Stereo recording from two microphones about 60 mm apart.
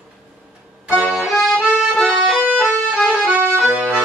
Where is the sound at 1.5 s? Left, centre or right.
Centre.